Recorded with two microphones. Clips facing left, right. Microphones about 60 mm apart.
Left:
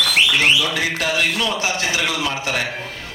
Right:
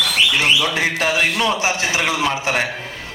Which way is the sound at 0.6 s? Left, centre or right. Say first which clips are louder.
Right 2 dB; right.